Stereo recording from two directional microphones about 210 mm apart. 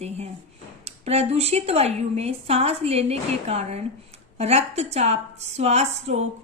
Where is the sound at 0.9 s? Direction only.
30° right (ahead or behind).